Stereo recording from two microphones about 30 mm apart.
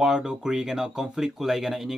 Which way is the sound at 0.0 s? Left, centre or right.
Right.